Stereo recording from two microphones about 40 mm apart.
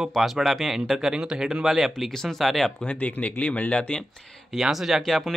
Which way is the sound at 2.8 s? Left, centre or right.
Left.